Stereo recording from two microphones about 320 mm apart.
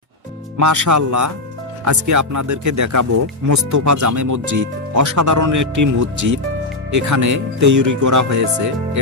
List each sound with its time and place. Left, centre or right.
0.5 s speech: right